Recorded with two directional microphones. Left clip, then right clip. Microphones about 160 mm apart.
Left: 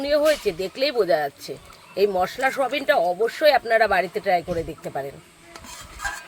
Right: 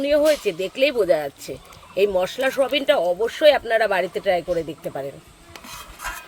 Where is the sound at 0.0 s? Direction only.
20° right (ahead or behind).